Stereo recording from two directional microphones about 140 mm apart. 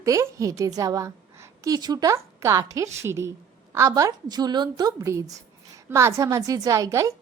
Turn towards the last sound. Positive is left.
turn(degrees=-20)  # may be behind; listen again after turning